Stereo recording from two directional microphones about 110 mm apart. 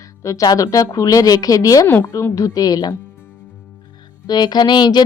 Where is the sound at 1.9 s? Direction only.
20° left (ahead or behind).